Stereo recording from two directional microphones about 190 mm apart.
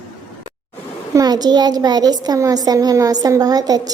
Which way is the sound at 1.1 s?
20° right (ahead or behind).